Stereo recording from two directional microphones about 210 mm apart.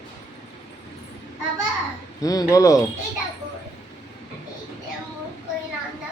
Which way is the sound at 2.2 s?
15° left (ahead or behind).